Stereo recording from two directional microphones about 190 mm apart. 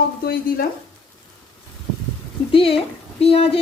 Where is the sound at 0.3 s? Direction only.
50° left (ahead or behind).